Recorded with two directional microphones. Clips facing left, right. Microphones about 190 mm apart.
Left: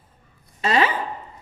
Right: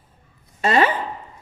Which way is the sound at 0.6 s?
50° right (ahead or behind).